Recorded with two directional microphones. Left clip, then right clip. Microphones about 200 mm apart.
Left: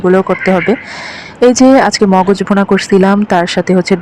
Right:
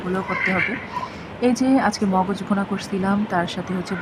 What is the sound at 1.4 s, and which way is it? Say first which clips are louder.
Speech: left 13 dB; 40° left (ahead or behind).